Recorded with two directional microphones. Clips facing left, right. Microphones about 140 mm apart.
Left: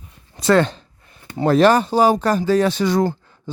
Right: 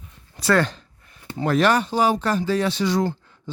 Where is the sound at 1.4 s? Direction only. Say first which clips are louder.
Left 5 dB; 30° left (ahead or behind).